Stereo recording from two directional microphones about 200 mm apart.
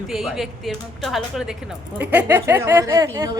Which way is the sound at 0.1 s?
Centre (ahead or behind).